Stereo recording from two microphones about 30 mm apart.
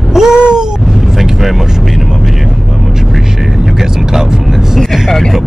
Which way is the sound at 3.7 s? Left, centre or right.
Centre.